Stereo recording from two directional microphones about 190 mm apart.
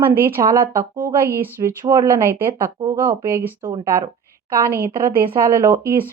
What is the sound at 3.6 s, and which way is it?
Speech, 25° right (ahead or behind).